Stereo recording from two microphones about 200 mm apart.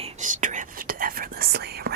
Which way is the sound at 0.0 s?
35° right (ahead or behind).